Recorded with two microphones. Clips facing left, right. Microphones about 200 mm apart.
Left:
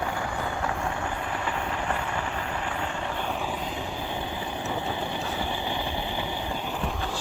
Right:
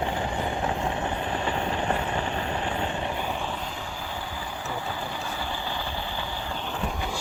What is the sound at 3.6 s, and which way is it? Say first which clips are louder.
Vehicle: left 3 dB; 20° left (ahead or behind).